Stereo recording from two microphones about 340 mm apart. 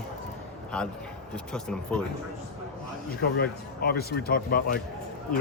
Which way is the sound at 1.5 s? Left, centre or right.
Centre.